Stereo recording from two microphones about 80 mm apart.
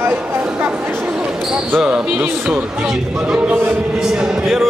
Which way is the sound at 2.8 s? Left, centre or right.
Centre.